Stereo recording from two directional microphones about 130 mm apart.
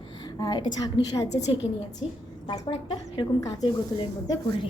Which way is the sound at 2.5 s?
35° left (ahead or behind).